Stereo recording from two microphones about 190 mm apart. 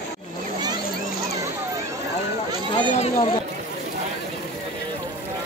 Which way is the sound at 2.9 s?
35° left (ahead or behind).